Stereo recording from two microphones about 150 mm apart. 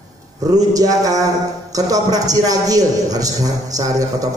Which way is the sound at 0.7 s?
25° right (ahead or behind).